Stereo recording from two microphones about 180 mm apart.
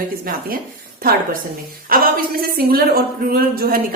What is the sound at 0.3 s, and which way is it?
A woman's voice, 55° right (ahead or behind).